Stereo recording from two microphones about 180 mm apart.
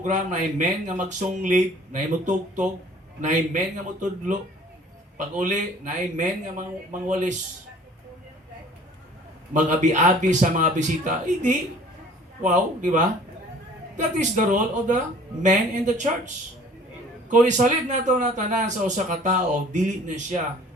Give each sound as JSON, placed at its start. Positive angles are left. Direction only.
{"t": 0.0, "sound": "a man's voice", "side_deg": -45}
{"t": 5.4, "sound": "a man's voice", "side_deg": -45}
{"t": 9.5, "sound": "a man's voice", "side_deg": -40}